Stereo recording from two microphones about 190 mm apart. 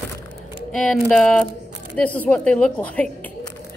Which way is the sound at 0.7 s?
Centre (ahead or behind).